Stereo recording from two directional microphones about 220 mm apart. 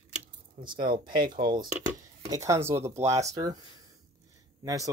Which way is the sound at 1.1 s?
40° right (ahead or behind).